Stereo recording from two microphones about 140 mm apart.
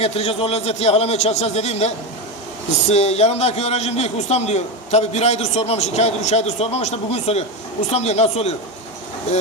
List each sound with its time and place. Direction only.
0.0 s a man's voice: 45° left (ahead or behind)
2.9 s a man's voice: 50° left (ahead or behind)